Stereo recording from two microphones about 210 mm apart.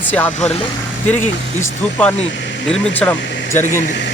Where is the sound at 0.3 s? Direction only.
30° left (ahead or behind).